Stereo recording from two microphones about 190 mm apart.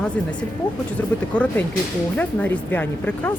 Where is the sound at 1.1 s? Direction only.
5° left (ahead or behind).